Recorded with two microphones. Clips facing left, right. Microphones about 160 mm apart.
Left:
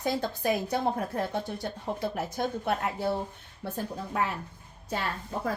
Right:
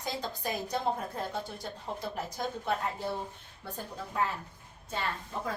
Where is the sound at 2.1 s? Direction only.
70° left (ahead or behind).